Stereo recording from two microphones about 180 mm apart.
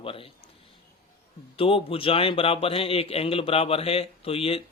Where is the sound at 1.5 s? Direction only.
30° left (ahead or behind).